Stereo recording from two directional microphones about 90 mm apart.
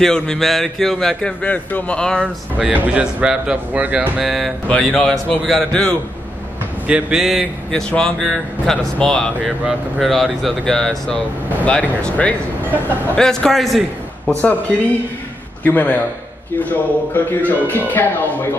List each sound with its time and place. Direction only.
0.0 s a man's voice: 5° left (ahead or behind)
2.2 s speech: 15° right (ahead or behind)
4.2 s speech: 5° right (ahead or behind)
4.6 s a man's voice: 10° left (ahead or behind)
6.9 s speech: 5° right (ahead or behind)
7.7 s a man's voice: 10° left (ahead or behind)
15.6 s a man's voice: 20° left (ahead or behind)